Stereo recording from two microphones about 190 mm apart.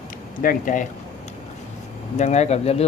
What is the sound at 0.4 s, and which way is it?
Speech, 45° left (ahead or behind).